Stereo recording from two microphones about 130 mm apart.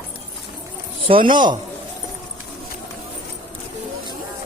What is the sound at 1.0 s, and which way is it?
Speech, 40° right (ahead or behind).